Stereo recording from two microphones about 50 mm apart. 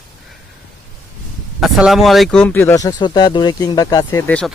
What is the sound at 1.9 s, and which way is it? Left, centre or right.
Speech, centre.